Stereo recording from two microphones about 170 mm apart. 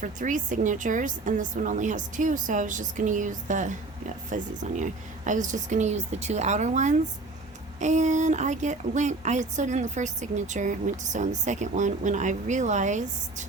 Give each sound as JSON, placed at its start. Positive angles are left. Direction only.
{"t": 0.0, "sound": "a woman's voice", "side_deg": -50}